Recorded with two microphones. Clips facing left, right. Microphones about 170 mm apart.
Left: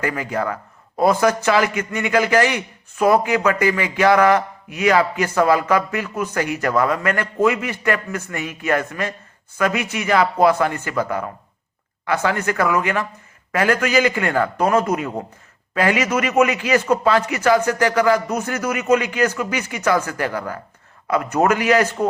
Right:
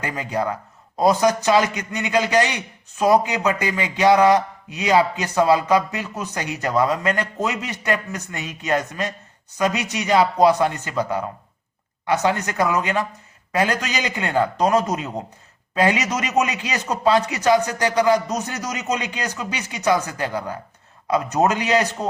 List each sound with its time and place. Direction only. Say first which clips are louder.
0.0 s a man's voice: left 2 dB; 20° right (ahead or behind)